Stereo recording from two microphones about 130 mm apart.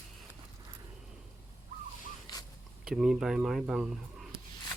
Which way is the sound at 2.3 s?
30° left (ahead or behind).